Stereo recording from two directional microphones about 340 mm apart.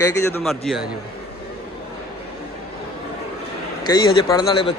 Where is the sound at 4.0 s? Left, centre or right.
Centre.